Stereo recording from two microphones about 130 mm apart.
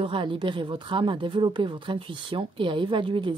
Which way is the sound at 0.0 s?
40° right (ahead or behind).